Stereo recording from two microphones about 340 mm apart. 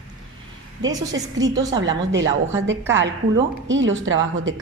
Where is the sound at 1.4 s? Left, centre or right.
Centre.